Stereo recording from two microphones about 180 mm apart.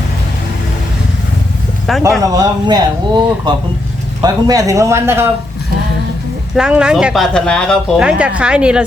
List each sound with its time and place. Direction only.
2.0 s speech: 20° right (ahead or behind)
6.6 s speech: 5° right (ahead or behind)